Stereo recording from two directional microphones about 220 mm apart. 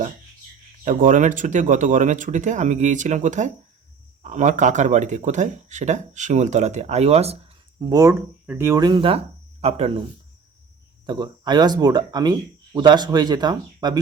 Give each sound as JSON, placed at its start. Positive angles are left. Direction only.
{"t": 0.9, "sound": "speech", "side_deg": -35}
{"t": 7.8, "sound": "speech", "side_deg": -15}
{"t": 11.0, "sound": "speech", "side_deg": -20}